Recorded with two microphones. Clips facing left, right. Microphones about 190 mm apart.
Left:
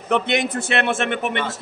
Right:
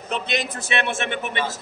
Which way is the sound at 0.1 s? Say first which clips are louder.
Left 6 dB; 60° left (ahead or behind).